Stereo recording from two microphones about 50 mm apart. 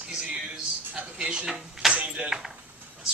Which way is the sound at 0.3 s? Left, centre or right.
Centre.